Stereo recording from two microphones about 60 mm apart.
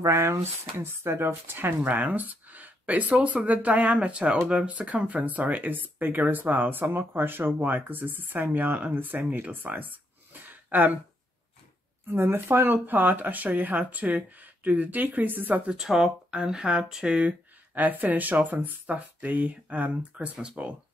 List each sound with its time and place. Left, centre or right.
0.0 s speech: right
1.8 s speech: right
10.4 s a sound: right
12.1 s speech: right
15.6 s speech: centre